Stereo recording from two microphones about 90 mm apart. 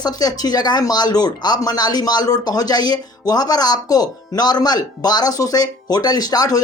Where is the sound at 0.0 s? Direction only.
45° left (ahead or behind).